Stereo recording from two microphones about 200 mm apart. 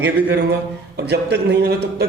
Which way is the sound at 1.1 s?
55° right (ahead or behind).